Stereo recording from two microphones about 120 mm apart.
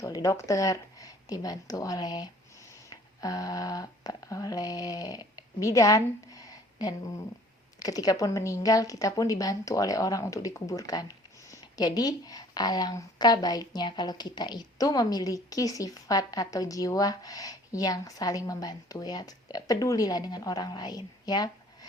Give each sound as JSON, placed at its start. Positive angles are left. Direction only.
{"t": 0.0, "sound": "speech", "side_deg": 25}
{"t": 2.9, "sound": "a sound", "side_deg": 30}
{"t": 7.8, "sound": "a woman's voice", "side_deg": 30}